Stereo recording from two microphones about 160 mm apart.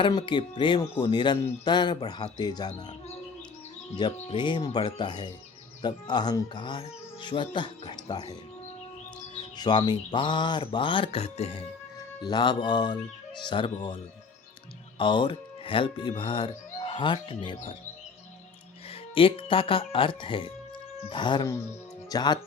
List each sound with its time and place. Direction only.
0.0 s speech: 30° left (ahead or behind)
3.9 s speech: 30° left (ahead or behind)
9.4 s speech: 30° left (ahead or behind)
11.9 s speech: 30° left (ahead or behind)
14.9 s speech: 30° left (ahead or behind)
19.1 s speech: 35° left (ahead or behind)